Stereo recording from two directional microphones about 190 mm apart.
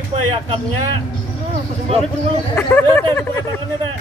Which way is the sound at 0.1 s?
25° right (ahead or behind).